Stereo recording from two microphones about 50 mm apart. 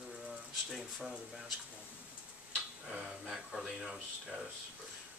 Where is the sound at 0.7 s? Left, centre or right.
Centre.